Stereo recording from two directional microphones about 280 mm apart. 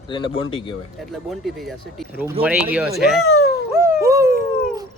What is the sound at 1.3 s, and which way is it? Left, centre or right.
Speech, centre.